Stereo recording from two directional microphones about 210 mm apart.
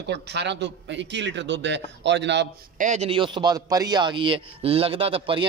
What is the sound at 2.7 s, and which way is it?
A man's voice, 35° right (ahead or behind).